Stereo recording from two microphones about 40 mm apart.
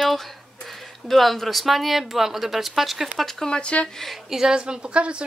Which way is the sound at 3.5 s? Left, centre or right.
Left.